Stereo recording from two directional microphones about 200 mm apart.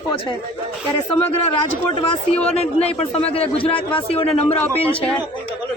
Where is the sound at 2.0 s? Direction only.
30° left (ahead or behind).